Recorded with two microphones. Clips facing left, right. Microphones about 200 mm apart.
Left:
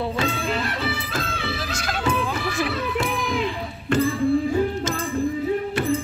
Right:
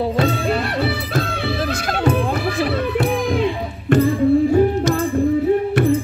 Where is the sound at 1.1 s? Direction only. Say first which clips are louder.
Right 7 dB; 60° right (ahead or behind).